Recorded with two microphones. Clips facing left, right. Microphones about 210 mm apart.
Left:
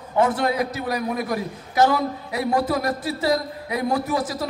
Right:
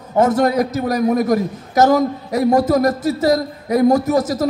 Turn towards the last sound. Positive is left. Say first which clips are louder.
# right 8 dB
turn(degrees=-45)  # may be behind; listen again after turning